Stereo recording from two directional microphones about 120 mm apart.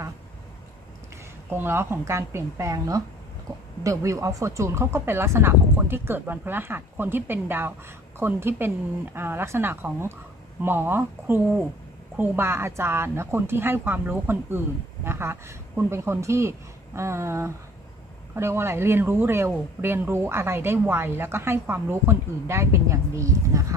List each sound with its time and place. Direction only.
1.5 s speech: 20° right (ahead or behind)